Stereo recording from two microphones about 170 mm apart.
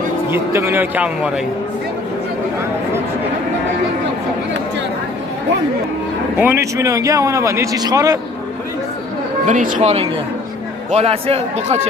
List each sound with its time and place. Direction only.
0.3 s speech: 15° right (ahead or behind)
6.3 s speech: 10° right (ahead or behind)
9.5 s a man's voice: 50° right (ahead or behind)